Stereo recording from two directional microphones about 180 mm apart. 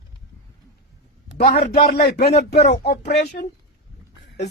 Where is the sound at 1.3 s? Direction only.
65° left (ahead or behind).